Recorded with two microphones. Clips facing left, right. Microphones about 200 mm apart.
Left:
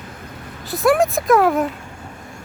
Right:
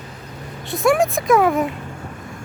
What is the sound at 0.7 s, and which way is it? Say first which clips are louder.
A child's voice: left 1 dB; centre (ahead or behind).